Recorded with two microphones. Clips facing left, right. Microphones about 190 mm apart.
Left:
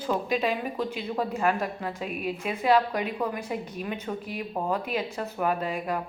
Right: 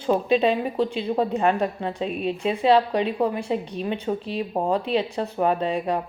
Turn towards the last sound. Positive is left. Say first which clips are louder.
# right 5 dB
turn(degrees=-30)  # may be behind; listen again after turning